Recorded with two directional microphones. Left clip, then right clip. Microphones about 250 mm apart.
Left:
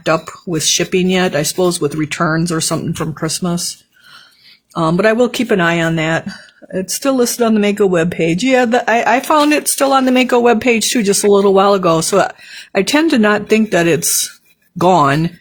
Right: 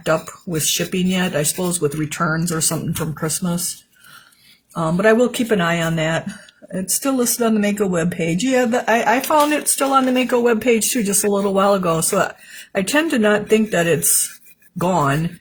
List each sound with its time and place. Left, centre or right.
0.0 s speech: left
4.7 s speech: left